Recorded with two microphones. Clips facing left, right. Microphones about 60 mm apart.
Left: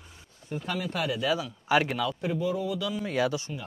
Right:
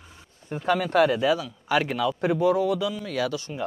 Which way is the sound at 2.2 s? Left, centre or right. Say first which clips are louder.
Right 7 dB; right.